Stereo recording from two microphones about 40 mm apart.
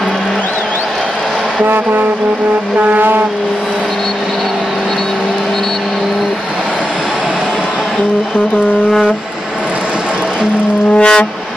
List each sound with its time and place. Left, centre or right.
11.0 s brass instrument: left